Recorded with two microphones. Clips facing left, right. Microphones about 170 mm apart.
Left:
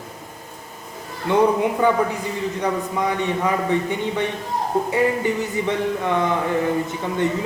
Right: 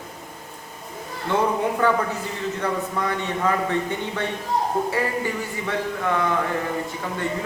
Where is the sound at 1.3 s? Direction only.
15° left (ahead or behind).